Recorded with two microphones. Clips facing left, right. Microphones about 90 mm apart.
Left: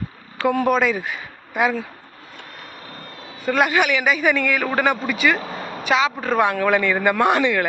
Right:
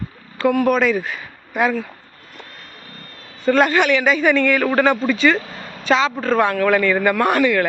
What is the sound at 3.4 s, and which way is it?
Speech, 10° left (ahead or behind).